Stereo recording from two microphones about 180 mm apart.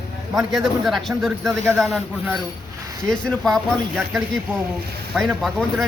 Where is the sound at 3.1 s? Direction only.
Centre (ahead or behind).